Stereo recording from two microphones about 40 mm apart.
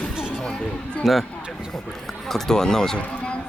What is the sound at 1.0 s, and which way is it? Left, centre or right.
Speech, centre.